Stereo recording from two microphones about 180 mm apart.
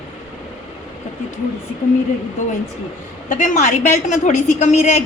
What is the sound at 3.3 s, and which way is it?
A woman's voice, 45° left (ahead or behind).